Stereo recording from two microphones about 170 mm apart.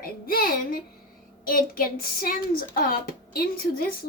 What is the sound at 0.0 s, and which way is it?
Speech, 60° left (ahead or behind).